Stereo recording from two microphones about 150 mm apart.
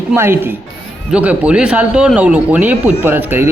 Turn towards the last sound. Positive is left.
turn(degrees=-15)  # may be behind; listen again after turning